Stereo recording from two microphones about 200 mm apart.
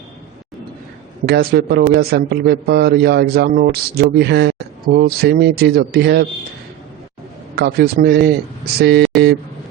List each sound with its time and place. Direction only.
1.2 s a man's voice: 50° right (ahead or behind)
7.5 s a man's voice: 50° right (ahead or behind)